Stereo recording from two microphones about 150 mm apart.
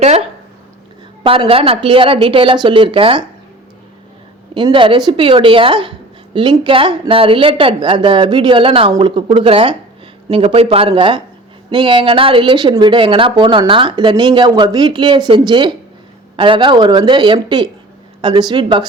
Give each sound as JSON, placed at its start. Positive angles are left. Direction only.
{"t": 0.0, "sound": "speech", "side_deg": -45}
{"t": 1.2, "sound": "speech", "side_deg": -35}
{"t": 4.5, "sound": "speech", "side_deg": -35}